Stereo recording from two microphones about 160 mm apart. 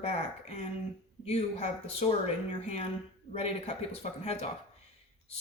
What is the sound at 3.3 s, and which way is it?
Speech, 40° left (ahead or behind).